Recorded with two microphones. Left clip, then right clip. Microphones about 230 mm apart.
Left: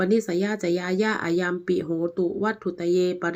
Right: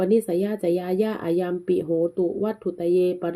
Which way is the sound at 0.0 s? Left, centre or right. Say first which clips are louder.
Right 2 dB; left.